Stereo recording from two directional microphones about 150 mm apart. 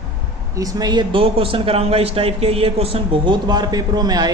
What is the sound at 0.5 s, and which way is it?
A man's voice, 25° right (ahead or behind).